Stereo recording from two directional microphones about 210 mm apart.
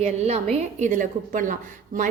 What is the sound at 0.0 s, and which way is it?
Speech, 30° right (ahead or behind).